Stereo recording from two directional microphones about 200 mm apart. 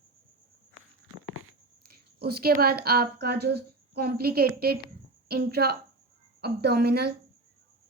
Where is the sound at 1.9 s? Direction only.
50° right (ahead or behind).